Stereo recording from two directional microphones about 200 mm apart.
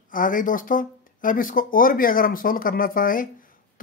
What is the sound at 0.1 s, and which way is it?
Speech, 45° left (ahead or behind).